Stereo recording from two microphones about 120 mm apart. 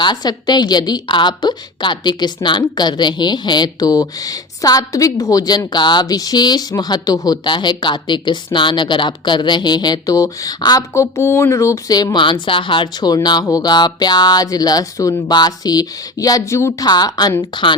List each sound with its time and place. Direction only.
0.0 s a woman's voice: 35° left (ahead or behind)
16.8 s a woman's voice: 35° left (ahead or behind)